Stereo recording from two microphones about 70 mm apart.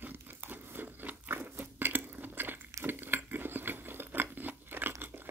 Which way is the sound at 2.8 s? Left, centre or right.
Right.